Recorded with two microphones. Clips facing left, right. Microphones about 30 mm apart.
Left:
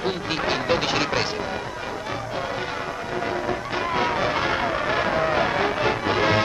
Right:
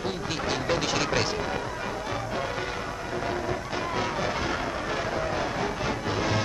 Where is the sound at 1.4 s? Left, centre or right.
Centre; by 6.4 s left.